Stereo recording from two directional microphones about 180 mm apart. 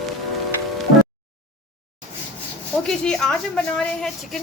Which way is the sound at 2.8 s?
5° left (ahead or behind).